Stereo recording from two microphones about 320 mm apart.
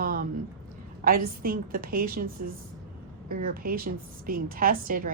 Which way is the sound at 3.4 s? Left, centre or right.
Right.